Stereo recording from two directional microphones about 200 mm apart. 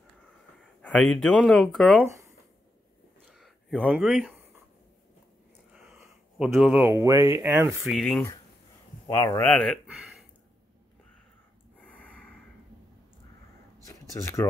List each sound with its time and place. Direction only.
0.8 s speech: 5° left (ahead or behind)
3.3 s a sound: centre (ahead or behind)
5.7 s speech: 5° right (ahead or behind)
8.0 s speech: 5° left (ahead or behind)
9.0 s a man's voice: 20° left (ahead or behind)
9.5 s speech: 5° left (ahead or behind)
11.8 s snort: 5° left (ahead or behind)
13.8 s a sound: 15° left (ahead or behind)